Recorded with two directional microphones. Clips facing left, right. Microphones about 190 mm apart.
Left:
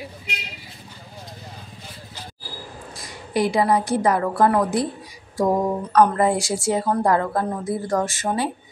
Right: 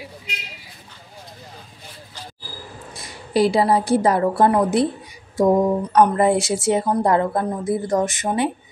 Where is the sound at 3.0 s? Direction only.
30° right (ahead or behind).